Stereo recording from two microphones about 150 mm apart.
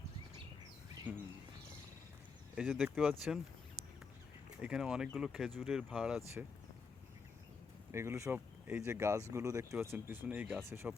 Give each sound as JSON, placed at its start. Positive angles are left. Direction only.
{"t": 1.1, "sound": "speech", "side_deg": -10}
{"t": 2.6, "sound": "speech", "side_deg": 0}
{"t": 4.6, "sound": "speech", "side_deg": -5}
{"t": 7.9, "sound": "speech", "side_deg": -20}